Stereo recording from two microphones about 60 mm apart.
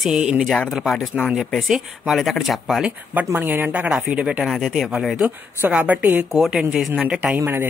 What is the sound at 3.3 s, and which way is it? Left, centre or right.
Speech, right.